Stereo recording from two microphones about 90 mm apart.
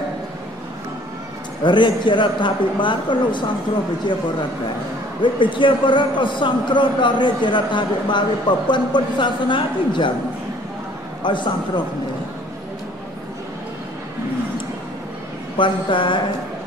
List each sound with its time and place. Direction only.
1.6 s a man's voice: 60° left (ahead or behind)
5.2 s a man's voice: 65° left (ahead or behind)
11.2 s a man's voice: 60° left (ahead or behind)
15.5 s a man's voice: 65° left (ahead or behind)